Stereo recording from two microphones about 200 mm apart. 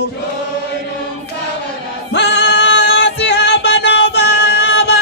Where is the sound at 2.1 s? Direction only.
60° left (ahead or behind).